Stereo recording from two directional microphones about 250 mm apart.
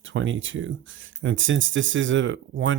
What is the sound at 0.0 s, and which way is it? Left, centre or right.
Speech, right.